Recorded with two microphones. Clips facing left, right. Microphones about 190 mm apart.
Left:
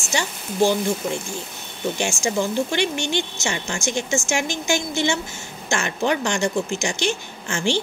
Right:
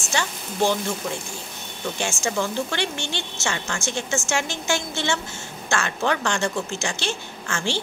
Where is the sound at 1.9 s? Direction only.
15° left (ahead or behind).